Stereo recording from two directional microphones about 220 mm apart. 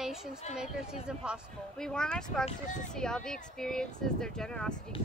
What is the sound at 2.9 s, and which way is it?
Speech, 5° left (ahead or behind).